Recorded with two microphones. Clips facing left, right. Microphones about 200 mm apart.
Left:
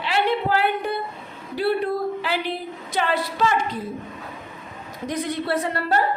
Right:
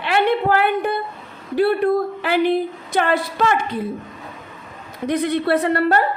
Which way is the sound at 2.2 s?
55° right (ahead or behind).